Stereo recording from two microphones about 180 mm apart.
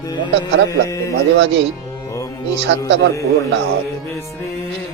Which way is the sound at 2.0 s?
15° left (ahead or behind).